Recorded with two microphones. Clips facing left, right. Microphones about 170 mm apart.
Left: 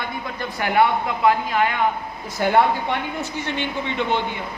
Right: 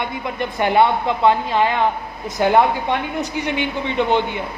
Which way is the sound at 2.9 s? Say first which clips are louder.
Right 4 dB; 15° right (ahead or behind).